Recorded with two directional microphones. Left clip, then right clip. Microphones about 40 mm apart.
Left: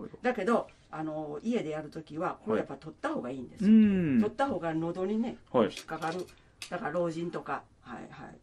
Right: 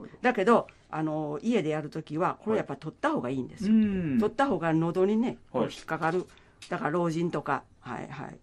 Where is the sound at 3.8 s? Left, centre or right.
Centre.